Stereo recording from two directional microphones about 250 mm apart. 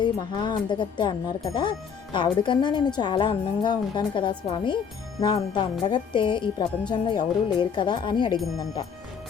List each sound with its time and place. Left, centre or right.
0.0 s a woman's voice: centre